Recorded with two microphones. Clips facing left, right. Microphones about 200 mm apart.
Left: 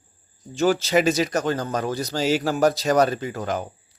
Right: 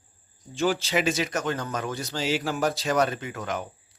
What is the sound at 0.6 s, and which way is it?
Speech, 45° left (ahead or behind).